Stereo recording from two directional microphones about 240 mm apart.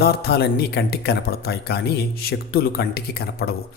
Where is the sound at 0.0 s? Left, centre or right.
Left.